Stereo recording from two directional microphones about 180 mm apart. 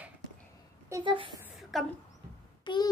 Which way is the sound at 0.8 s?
20° right (ahead or behind).